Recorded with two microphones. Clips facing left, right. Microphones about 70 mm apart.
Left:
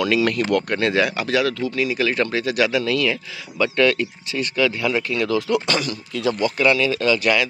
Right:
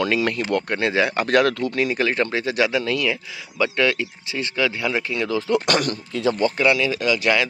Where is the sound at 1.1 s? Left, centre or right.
Right; by 5.4 s centre.